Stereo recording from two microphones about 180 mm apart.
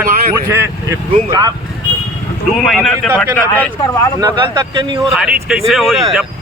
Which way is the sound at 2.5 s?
Centre (ahead or behind).